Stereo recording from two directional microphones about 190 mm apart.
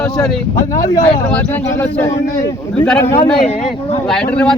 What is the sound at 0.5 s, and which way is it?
A man's voice, 15° left (ahead or behind).